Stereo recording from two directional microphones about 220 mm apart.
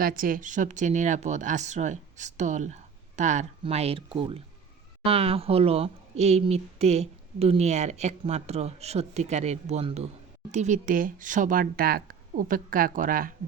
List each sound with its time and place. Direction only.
0.0 s speech: 40° right (ahead or behind)